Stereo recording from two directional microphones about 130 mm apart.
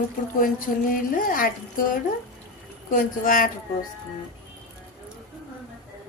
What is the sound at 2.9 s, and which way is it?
Speech, 90° left.